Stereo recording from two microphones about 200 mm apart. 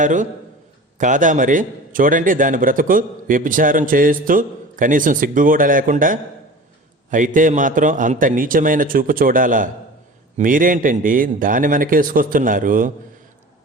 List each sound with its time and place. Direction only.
0.0 s a man's voice: 40° right (ahead or behind)